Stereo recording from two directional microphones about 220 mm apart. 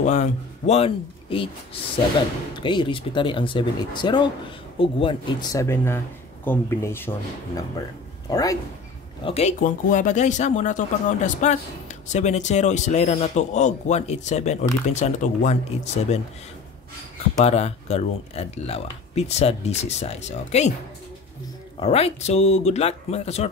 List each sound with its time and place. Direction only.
0.0 s speech: 30° left (ahead or behind)
9.2 s a man's voice: 30° left (ahead or behind)
17.4 s speech: 30° left (ahead or behind)
21.7 s speech: 25° left (ahead or behind)